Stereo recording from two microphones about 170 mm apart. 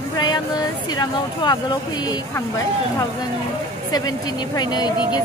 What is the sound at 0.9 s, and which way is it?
A woman's voice, 25° left (ahead or behind).